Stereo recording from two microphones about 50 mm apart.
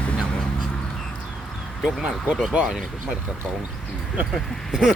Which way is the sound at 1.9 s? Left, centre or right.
Centre.